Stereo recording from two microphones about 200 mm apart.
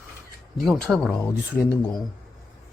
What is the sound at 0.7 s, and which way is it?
Speech, 5° left (ahead or behind).